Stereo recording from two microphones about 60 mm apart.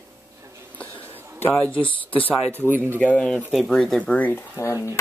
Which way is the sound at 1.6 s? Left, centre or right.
Left.